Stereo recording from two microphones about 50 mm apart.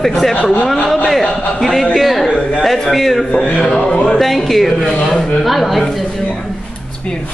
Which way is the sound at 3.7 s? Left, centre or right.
Left.